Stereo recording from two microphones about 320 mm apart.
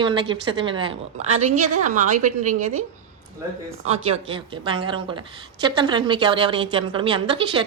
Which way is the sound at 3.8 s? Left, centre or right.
Centre.